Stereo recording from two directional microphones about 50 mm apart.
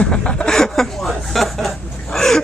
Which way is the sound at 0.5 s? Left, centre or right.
Centre.